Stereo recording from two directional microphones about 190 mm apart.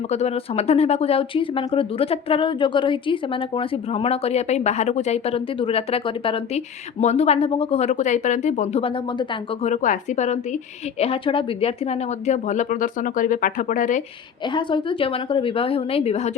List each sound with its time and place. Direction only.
0.1 s speech: 35° left (ahead or behind)
9.6 s speech: 45° left (ahead or behind)
14.4 s a woman's voice: 25° left (ahead or behind)